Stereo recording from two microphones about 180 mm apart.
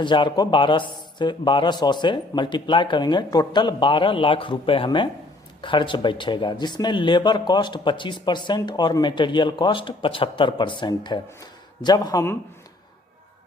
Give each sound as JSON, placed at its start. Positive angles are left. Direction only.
{"t": 0.0, "sound": "speech", "side_deg": 25}